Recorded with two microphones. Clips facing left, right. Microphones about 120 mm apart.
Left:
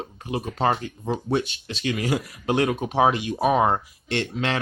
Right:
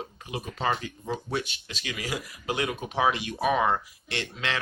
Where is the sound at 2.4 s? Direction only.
45° left (ahead or behind).